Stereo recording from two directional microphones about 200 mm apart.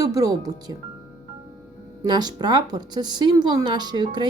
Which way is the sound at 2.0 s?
20° right (ahead or behind).